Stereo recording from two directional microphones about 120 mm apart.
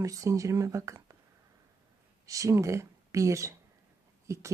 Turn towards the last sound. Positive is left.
turn(degrees=-25)  # may be behind; listen again after turning